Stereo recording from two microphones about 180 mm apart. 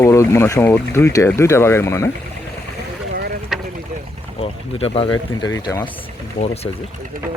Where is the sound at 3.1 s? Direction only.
65° right (ahead or behind).